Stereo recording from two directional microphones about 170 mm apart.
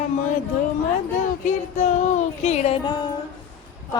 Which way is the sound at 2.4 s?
40° left (ahead or behind).